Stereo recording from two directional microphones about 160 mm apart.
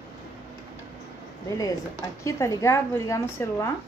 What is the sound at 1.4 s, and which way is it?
Speech, 20° left (ahead or behind).